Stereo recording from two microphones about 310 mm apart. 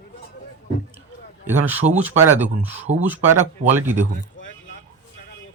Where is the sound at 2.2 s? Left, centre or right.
Centre.